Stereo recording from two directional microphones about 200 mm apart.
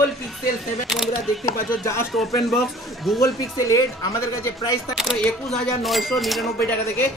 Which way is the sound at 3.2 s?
15° left (ahead or behind).